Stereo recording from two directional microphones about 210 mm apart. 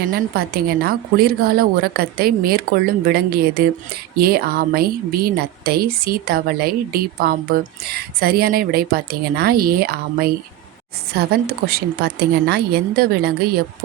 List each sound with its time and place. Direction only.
0.1 s speech: 45° right (ahead or behind)